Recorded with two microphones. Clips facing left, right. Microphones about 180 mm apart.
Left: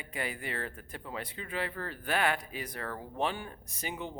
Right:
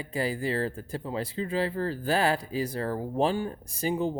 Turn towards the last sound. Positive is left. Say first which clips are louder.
# right 11 dB
turn(degrees=-30)  # may be behind; listen again after turning